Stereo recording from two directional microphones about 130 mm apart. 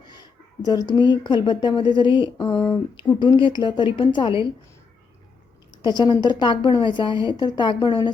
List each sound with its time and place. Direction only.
0.0 s speech: 35° left (ahead or behind)
6.0 s speech: 35° left (ahead or behind)